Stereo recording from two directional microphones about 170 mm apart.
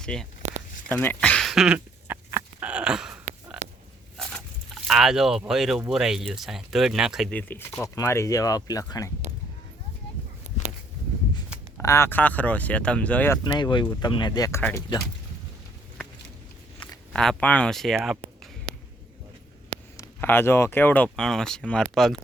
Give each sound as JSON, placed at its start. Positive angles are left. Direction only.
{"t": 0.0, "sound": "speech", "side_deg": 5}
{"t": 0.9, "sound": "a sound", "side_deg": 10}
{"t": 4.2, "sound": "frog", "side_deg": 5}
{"t": 4.9, "sound": "speech", "side_deg": 0}
{"t": 7.3, "sound": "speech", "side_deg": 10}
{"t": 10.5, "sound": "a sound", "side_deg": -40}
{"t": 11.8, "sound": "speech", "side_deg": 15}
{"t": 13.4, "sound": "speech", "side_deg": 25}
{"t": 17.1, "sound": "speech", "side_deg": 5}
{"t": 18.2, "sound": "a sound", "side_deg": -40}
{"t": 20.0, "sound": "speech", "side_deg": 15}